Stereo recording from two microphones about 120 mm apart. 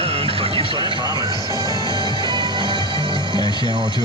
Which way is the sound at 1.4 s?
35° right (ahead or behind).